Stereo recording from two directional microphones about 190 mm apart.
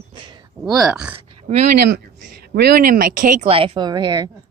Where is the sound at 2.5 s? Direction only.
55° right (ahead or behind).